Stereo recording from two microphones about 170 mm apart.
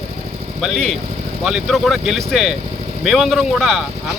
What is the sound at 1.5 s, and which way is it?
Speech, 5° right (ahead or behind).